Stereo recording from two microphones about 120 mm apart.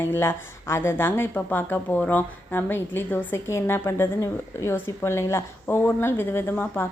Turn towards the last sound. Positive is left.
turn(degrees=15)  # may be behind; listen again after turning